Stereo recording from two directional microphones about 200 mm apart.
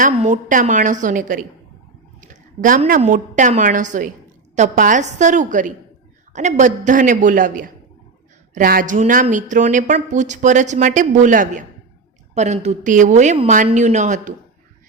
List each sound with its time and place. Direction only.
0.0 s a woman's voice: 40° right (ahead or behind)